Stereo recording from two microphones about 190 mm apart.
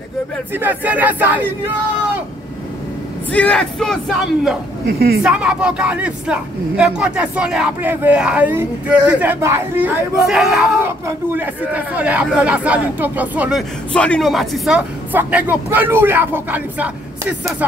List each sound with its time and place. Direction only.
0.5 s speech: 10° right (ahead or behind)
3.3 s speech: 5° left (ahead or behind)
4.8 s a woman's voice: 55° right (ahead or behind)
5.2 s speech: 5° right (ahead or behind)
13.9 s speech: 5° left (ahead or behind)